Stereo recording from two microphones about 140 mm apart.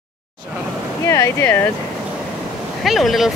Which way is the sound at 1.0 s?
20° left (ahead or behind).